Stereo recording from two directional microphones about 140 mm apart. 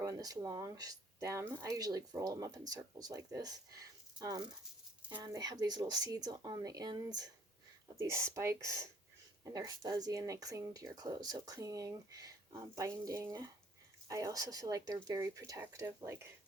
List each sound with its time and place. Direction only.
0.0 s speech: 25° right (ahead or behind)